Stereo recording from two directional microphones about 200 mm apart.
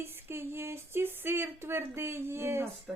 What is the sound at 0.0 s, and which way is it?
A woman's voice, 10° right (ahead or behind).